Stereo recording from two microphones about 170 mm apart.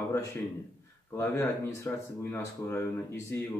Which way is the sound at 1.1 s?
15° left (ahead or behind).